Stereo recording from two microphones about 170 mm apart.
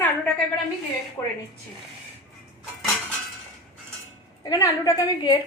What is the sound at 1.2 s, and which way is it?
Speech, 15° left (ahead or behind).